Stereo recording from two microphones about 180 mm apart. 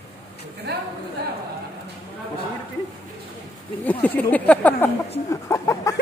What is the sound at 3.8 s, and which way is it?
Speech, 10° left (ahead or behind).